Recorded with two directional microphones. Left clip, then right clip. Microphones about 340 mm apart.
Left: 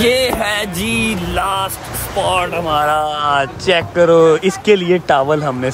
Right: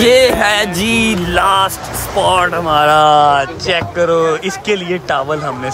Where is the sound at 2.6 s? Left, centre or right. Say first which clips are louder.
Right 5 dB; right.